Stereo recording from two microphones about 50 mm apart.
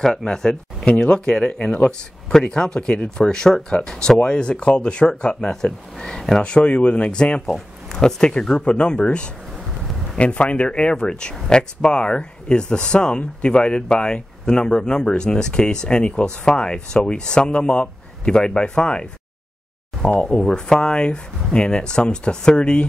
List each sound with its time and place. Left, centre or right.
0.0 s speech: centre
6.4 s speech: left
7.4 s a sound: centre
8.0 s speech: centre
20.2 s speech: centre